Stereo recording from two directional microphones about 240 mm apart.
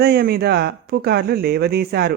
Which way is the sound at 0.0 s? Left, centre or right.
Right.